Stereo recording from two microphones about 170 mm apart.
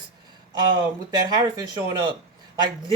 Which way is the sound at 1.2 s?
25° right (ahead or behind).